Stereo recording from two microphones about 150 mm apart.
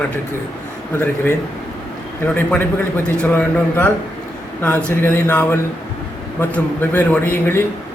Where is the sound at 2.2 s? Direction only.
10° left (ahead or behind).